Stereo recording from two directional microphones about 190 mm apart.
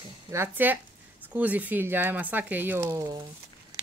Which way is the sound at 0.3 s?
10° right (ahead or behind).